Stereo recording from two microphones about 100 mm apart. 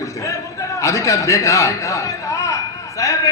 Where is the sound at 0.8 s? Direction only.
30° left (ahead or behind).